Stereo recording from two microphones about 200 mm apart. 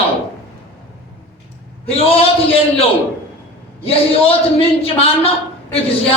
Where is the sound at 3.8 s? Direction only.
30° left (ahead or behind).